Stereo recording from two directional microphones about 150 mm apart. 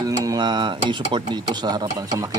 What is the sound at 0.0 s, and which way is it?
Speech, 25° right (ahead or behind).